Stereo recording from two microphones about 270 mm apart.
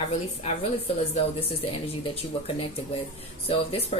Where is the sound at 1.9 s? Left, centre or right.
Left.